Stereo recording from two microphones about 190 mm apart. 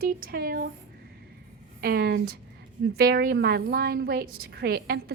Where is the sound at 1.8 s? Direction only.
55° right (ahead or behind).